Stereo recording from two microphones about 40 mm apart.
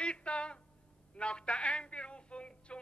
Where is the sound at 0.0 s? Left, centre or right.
Left.